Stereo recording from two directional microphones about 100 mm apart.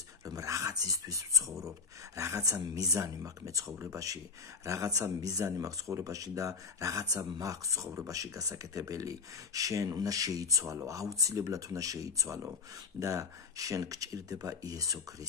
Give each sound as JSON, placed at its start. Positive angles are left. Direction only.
{"t": 0.2, "sound": "speech", "side_deg": -35}